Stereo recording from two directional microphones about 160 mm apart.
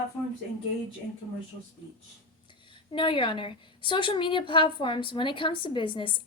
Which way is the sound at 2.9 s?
30° left (ahead or behind).